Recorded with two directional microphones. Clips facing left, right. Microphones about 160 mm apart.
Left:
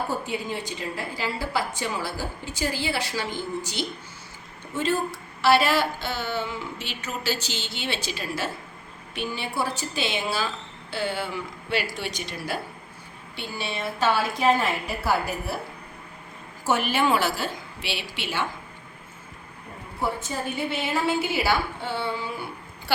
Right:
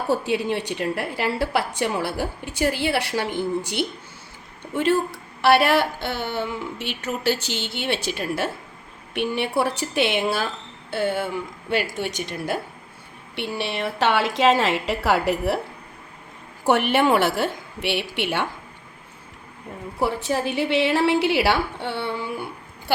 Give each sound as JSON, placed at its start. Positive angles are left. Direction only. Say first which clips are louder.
{"t": 0.1, "sound": "a woman's voice", "louder": "right 7 dB", "side_deg": -75}
{"t": 13.3, "sound": "a woman's voice", "louder": "right 5 dB", "side_deg": -70}
{"t": 16.6, "sound": "a woman's voice", "louder": "right 5 dB", "side_deg": -65}
{"t": 20.0, "sound": "a woman's voice", "louder": "right 5 dB", "side_deg": -80}